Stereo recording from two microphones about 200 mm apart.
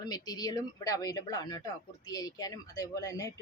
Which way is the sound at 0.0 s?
20° left (ahead or behind).